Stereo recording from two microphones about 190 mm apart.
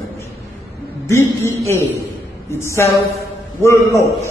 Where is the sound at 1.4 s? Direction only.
15° left (ahead or behind).